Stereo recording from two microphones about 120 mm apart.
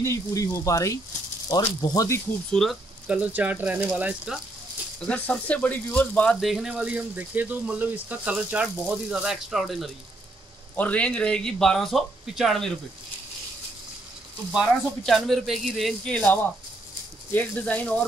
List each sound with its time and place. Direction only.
0.0 s speech: 25° left (ahead or behind)
2.5 s speech: centre (ahead or behind)
3.1 s speech: 10° right (ahead or behind)
5.0 s speech: 10° left (ahead or behind)
6.4 s speech: 5° right (ahead or behind)
10.8 s speech: 10° left (ahead or behind)
14.5 s speech: 5° right (ahead or behind); by 18.0 s 15° left (ahead or behind)